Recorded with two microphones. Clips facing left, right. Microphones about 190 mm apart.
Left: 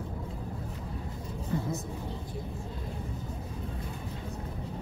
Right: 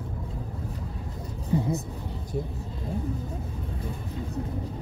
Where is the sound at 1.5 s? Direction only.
20° right (ahead or behind).